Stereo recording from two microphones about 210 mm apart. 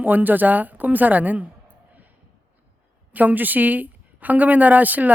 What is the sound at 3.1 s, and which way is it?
A man's voice, 10° right (ahead or behind).